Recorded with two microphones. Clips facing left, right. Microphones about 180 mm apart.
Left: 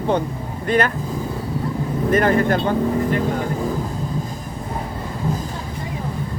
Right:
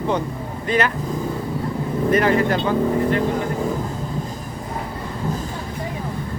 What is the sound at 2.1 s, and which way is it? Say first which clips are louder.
Speech: left 1 dB; 50° left (ahead or behind).